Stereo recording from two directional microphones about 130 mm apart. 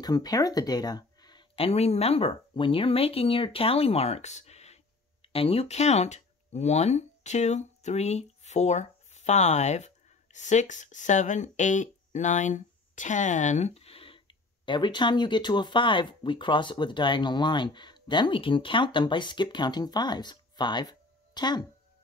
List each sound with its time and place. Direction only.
0.0 s speech: 30° left (ahead or behind)
1.5 s speech: 50° left (ahead or behind); by 21.6 s 35° left (ahead or behind)